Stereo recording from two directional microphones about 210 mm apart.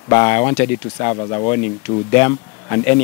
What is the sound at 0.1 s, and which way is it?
Speech, 10° left (ahead or behind).